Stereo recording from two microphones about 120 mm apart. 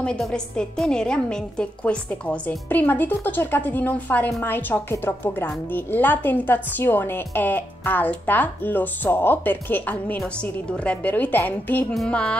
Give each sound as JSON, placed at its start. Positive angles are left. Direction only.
{"t": 0.0, "sound": "a woman's voice", "side_deg": 10}
{"t": 11.9, "sound": "a woman's voice", "side_deg": 5}